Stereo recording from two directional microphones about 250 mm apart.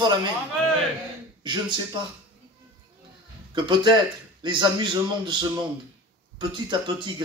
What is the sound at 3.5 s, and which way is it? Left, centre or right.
A man's voice, centre.